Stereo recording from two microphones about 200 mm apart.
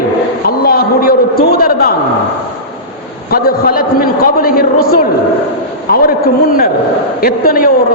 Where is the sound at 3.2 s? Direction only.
50° left (ahead or behind).